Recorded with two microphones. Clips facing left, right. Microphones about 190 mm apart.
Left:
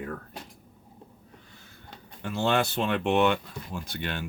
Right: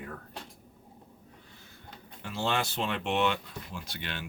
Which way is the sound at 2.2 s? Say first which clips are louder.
Left 5 dB; 55° left (ahead or behind).